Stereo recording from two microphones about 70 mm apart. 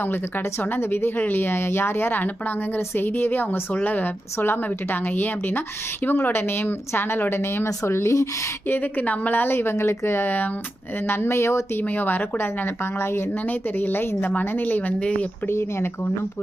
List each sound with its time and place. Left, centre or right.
0.0 s speech: left
8.6 s a woman's voice: left
11.8 s a woman's voice: left
15.4 s speech: left